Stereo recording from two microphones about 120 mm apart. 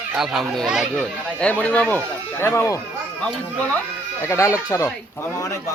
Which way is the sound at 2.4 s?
25° left (ahead or behind).